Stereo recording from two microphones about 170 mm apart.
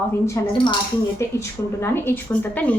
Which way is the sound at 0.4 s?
15° left (ahead or behind).